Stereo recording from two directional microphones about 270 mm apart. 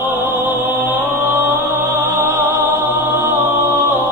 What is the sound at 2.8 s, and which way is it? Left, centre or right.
Choir, centre.